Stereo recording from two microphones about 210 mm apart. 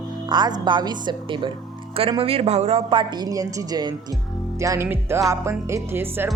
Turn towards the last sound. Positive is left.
turn(degrees=-10)  # may be behind; listen again after turning